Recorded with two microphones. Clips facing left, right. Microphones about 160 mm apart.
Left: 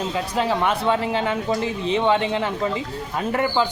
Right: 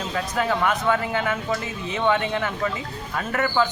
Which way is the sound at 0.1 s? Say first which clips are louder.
Right 2 dB; 30° left (ahead or behind).